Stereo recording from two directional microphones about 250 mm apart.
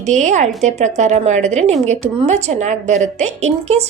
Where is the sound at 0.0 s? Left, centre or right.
Right.